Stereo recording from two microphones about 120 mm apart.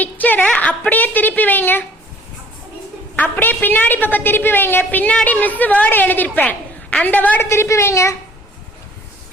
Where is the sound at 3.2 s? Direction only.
15° left (ahead or behind).